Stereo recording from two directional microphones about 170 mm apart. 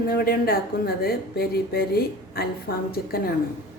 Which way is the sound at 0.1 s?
60° left (ahead or behind).